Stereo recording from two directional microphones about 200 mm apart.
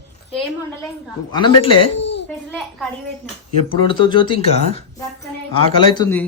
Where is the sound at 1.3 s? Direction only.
25° left (ahead or behind).